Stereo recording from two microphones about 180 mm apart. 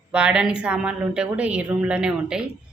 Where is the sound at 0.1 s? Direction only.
5° right (ahead or behind).